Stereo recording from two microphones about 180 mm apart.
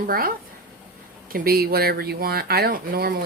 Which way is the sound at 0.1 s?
55° right (ahead or behind).